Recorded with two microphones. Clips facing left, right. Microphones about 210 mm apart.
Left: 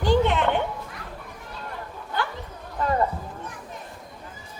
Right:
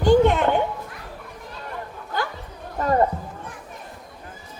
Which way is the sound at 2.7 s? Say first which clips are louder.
Right 4 dB; 40° right (ahead or behind).